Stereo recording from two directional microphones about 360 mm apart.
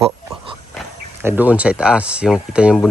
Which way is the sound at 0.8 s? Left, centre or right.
Centre.